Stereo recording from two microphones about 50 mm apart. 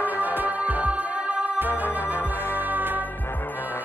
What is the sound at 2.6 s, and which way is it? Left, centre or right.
Music, right.